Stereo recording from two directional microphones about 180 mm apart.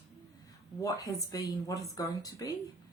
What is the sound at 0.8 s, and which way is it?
Speech, 20° left (ahead or behind).